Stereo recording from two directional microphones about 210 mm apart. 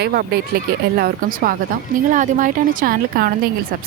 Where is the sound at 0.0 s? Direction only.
50° right (ahead or behind).